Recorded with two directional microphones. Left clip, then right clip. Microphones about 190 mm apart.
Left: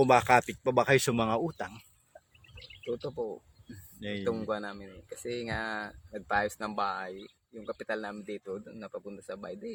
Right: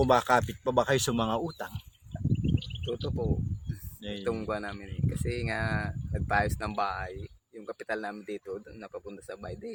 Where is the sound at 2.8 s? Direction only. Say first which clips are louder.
Left 2 dB; 25° right (ahead or behind).